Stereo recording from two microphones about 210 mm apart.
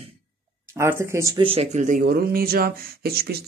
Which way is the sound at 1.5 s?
30° right (ahead or behind).